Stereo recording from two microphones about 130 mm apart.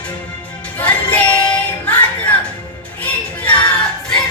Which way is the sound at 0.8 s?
15° left (ahead or behind).